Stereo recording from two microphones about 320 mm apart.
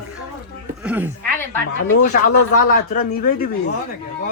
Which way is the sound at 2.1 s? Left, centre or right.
Left.